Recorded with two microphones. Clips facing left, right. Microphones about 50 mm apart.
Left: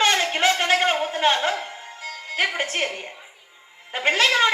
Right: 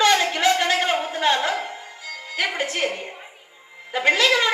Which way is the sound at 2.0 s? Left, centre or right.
Left.